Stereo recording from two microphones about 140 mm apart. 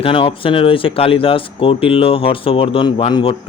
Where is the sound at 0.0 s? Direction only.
40° left (ahead or behind).